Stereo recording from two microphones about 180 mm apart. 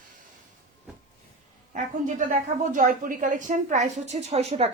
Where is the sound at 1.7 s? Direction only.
45° right (ahead or behind).